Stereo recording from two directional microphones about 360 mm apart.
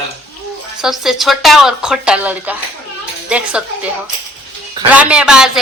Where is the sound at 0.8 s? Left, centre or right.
Centre.